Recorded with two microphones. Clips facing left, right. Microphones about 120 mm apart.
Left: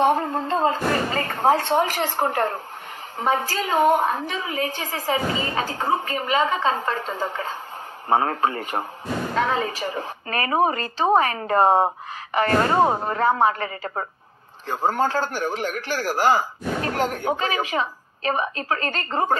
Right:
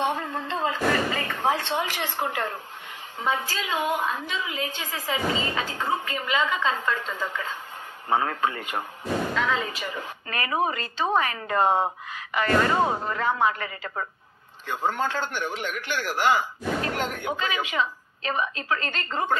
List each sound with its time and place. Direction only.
0.0 s a woman's voice: 40° left (ahead or behind)